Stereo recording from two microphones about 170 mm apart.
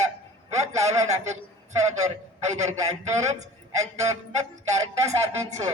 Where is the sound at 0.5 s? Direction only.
40° right (ahead or behind).